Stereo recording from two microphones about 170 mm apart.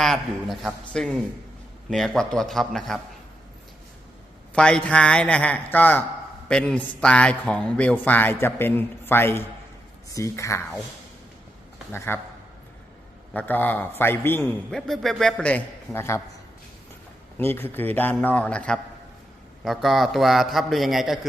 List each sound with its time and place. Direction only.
0.0 s a man's voice: centre (ahead or behind)
4.5 s a man's voice: 5° left (ahead or behind)
11.9 s a man's voice: 15° left (ahead or behind)
13.3 s a man's voice: 10° left (ahead or behind)
17.3 s a man's voice: 10° left (ahead or behind)